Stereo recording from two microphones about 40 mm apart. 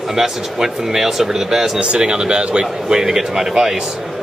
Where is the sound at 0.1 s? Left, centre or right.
Centre.